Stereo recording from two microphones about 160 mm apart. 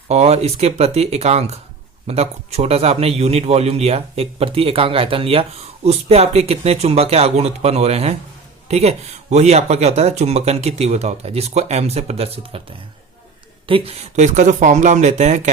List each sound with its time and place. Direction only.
0.1 s a man's voice: 40° right (ahead or behind)
13.7 s speech: 35° right (ahead or behind)